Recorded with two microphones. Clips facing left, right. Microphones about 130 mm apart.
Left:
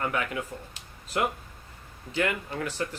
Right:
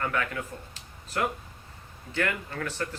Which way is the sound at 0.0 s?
20° left (ahead or behind).